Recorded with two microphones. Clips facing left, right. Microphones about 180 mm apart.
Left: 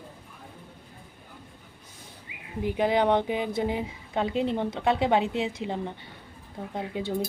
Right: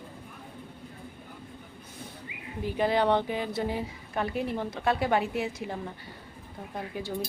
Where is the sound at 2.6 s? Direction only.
15° left (ahead or behind).